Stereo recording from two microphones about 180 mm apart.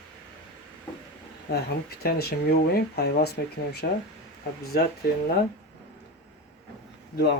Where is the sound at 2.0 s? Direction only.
60° left (ahead or behind).